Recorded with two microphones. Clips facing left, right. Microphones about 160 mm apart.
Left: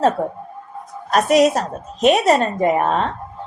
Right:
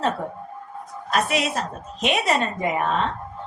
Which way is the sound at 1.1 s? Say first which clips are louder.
Left 9 dB; 40° left (ahead or behind).